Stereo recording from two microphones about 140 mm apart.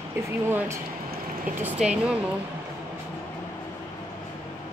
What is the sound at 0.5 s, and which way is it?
Speech, 15° right (ahead or behind).